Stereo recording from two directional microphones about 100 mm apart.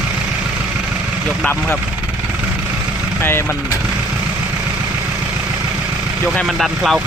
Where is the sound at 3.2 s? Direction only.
20° left (ahead or behind).